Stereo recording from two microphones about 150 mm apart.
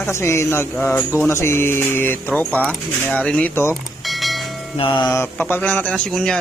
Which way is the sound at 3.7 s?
Centre (ahead or behind).